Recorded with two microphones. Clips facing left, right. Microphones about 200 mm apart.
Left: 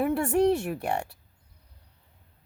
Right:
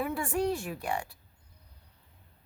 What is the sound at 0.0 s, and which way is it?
A woman's voice, 65° left (ahead or behind).